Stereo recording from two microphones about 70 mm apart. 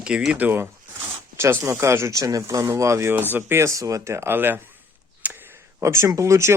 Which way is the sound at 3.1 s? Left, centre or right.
Right.